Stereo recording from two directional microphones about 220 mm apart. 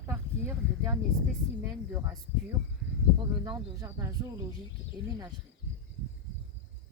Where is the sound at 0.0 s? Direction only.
10° right (ahead or behind).